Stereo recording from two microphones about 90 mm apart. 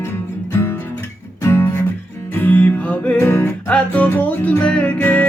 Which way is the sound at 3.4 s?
15° left (ahead or behind).